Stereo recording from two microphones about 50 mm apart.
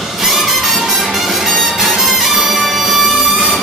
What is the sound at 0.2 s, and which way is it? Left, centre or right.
Music, centre.